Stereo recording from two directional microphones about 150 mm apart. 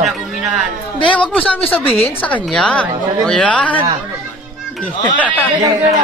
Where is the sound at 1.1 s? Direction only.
10° left (ahead or behind).